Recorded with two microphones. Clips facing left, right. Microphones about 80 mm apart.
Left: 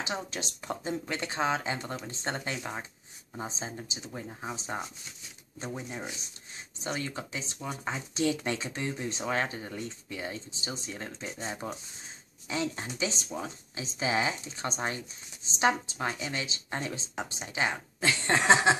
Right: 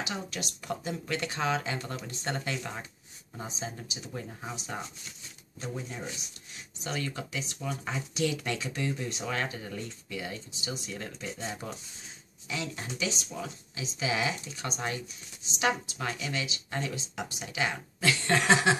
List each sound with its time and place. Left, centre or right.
0.0 s speech: left
4.1 s speech: centre
5.6 s speech: left